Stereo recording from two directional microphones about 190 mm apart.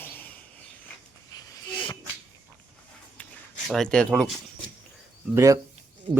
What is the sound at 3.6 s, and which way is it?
Speech, centre (ahead or behind).